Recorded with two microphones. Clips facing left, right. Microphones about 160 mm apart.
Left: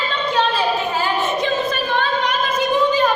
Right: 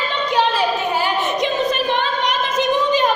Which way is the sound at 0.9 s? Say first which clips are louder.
Even; 15° right (ahead or behind).